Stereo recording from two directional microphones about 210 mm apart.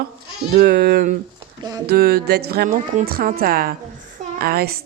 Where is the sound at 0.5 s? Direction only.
45° right (ahead or behind).